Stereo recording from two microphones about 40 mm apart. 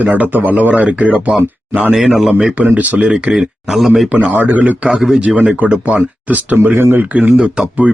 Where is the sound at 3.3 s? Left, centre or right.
Centre.